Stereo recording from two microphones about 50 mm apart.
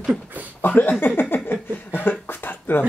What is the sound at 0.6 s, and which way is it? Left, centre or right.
Speech, left.